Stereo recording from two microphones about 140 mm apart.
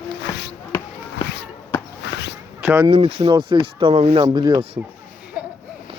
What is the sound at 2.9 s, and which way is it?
Speech, 45° right (ahead or behind).